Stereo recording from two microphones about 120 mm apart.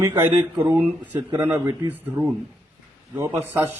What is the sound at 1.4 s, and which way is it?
A man's voice, 15° right (ahead or behind).